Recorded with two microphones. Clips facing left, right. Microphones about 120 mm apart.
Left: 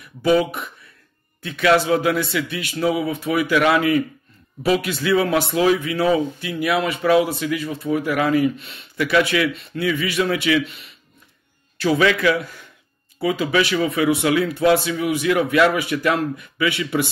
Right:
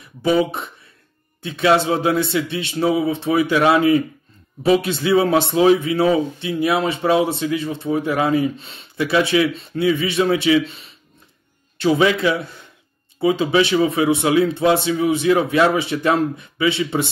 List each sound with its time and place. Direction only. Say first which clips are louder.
0.0 s a man's voice: even; 25° right (ahead or behind)
11.8 s a man's voice: right 1 dB; 25° right (ahead or behind)